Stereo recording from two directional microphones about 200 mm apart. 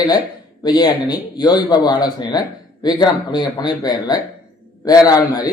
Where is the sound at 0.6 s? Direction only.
20° left (ahead or behind).